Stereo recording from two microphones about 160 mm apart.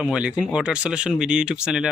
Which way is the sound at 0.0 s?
5° right (ahead or behind).